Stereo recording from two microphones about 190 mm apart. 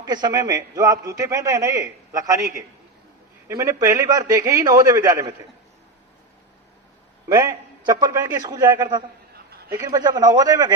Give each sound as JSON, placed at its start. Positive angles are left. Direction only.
{"t": 0.0, "sound": "a man's voice", "side_deg": -20}
{"t": 7.3, "sound": "a man's voice", "side_deg": -20}
{"t": 9.3, "sound": "a sound", "side_deg": -55}
{"t": 9.7, "sound": "a man's voice", "side_deg": -15}